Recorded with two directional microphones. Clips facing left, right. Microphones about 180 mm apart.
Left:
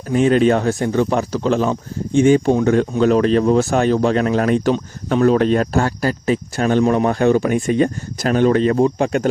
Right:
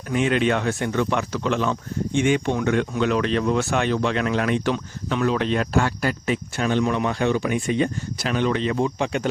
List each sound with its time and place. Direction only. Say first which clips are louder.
0.1 s speech: left 7 dB; 35° left (ahead or behind)